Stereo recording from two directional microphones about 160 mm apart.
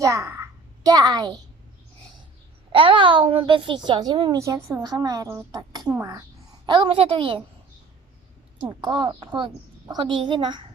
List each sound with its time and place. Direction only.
0.0 s a child's voice: 20° right (ahead or behind)
2.7 s a child's voice: 35° right (ahead or behind)
6.7 s a child's voice: 35° right (ahead or behind)
8.6 s a woman's voice: 30° right (ahead or behind)